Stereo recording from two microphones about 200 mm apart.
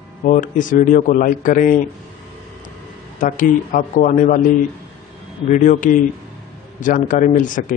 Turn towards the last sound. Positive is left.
turn(degrees=40)  # may be behind; listen again after turning